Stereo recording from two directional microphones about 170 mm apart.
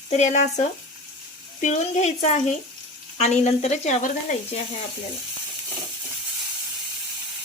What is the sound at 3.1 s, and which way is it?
Sizzle, 40° left (ahead or behind).